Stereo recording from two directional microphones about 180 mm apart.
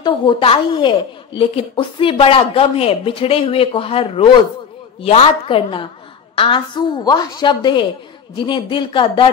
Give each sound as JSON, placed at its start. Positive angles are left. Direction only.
{"t": 0.0, "sound": "a woman's voice", "side_deg": 30}